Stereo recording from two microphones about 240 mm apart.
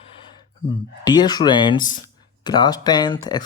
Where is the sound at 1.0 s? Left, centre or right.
Centre.